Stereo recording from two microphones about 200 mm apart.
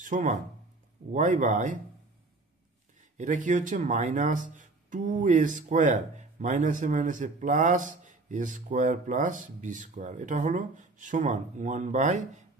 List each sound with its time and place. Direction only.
0.0 s speech: 40° right (ahead or behind)
3.2 s speech: 40° right (ahead or behind)